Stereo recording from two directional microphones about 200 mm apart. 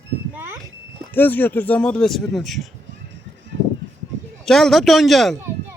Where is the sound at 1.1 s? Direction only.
10° left (ahead or behind).